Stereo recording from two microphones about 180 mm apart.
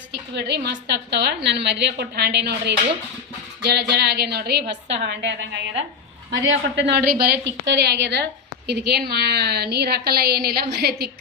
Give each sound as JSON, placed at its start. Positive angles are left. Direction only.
{"t": 0.1, "sound": "a woman's voice", "side_deg": -70}